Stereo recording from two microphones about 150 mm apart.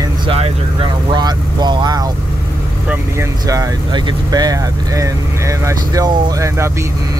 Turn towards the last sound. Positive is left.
turn(degrees=-20)  # may be behind; listen again after turning